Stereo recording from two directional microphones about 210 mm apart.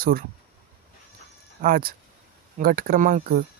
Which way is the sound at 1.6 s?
45° right (ahead or behind).